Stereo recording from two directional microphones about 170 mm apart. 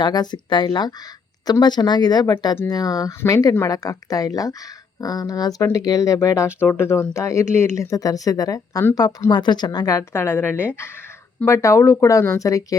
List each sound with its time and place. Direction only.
0.0 s speech: 25° left (ahead or behind)